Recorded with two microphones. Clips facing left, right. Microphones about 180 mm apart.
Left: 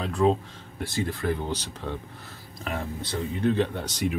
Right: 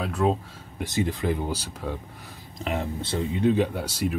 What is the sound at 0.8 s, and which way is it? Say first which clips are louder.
Speech: right 2 dB; 20° right (ahead or behind).